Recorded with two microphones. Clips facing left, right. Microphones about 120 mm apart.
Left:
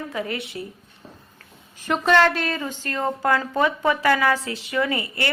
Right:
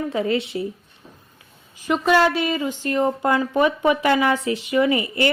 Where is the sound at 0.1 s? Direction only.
25° right (ahead or behind).